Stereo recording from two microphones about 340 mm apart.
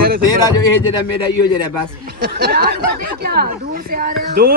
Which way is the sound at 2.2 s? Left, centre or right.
Right.